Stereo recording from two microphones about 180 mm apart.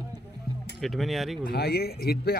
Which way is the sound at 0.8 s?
Centre (ahead or behind).